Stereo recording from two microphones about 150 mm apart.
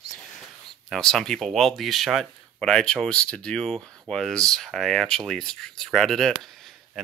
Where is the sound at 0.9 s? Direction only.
Centre (ahead or behind).